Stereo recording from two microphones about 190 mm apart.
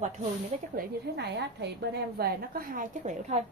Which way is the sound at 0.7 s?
60° right (ahead or behind).